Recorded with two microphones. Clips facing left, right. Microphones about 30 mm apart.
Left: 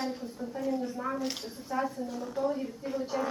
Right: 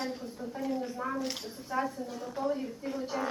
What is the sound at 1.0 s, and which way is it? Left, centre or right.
A woman's voice, centre.